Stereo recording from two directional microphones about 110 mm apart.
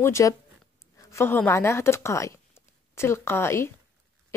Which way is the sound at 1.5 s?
25° left (ahead or behind).